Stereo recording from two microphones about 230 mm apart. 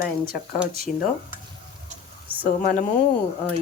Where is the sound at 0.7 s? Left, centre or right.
Left.